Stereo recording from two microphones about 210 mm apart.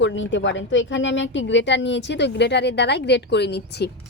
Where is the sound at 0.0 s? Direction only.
60° left (ahead or behind).